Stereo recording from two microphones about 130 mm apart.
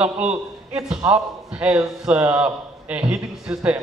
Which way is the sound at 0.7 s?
5° right (ahead or behind).